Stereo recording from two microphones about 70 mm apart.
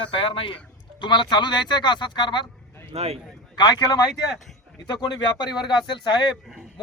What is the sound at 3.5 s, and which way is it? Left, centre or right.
Speech, left.